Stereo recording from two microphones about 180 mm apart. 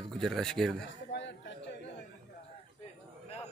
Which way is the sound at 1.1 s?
75° left (ahead or behind).